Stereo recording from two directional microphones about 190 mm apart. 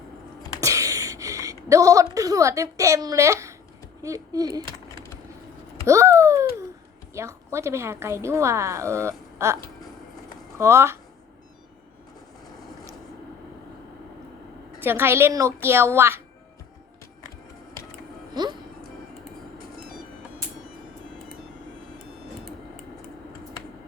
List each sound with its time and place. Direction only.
0.6 s speech: 15° right (ahead or behind)
5.8 s a child's voice: 15° right (ahead or behind)
10.6 s a woman's voice: 15° right (ahead or behind)
14.8 s a woman's voice: 10° right (ahead or behind)
19.5 s music: 50° right (ahead or behind)